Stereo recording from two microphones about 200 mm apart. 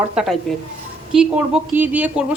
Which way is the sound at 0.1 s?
5° right (ahead or behind).